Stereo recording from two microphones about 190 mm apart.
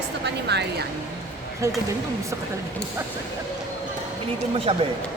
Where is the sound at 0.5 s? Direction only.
60° right (ahead or behind).